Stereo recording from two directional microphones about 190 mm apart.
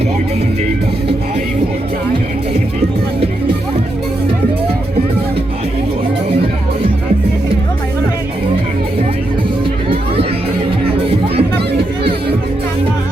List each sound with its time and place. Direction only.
11.0 s music: 30° right (ahead or behind)